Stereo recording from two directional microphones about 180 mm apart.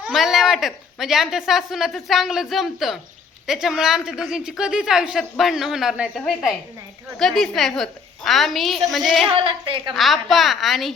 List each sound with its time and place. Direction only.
0.0 s a woman's voice: centre (ahead or behind)
9.3 s a woman's voice: 30° right (ahead or behind)
9.9 s a woman's voice: centre (ahead or behind)